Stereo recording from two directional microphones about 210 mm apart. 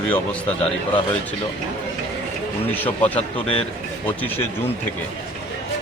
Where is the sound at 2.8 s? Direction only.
10° left (ahead or behind).